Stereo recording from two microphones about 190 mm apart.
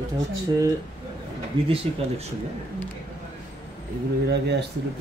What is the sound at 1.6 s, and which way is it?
Speech, 25° right (ahead or behind).